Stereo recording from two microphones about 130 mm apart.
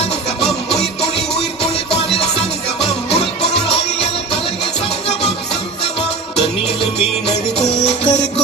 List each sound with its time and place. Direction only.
7.9 s music: 55° left (ahead or behind)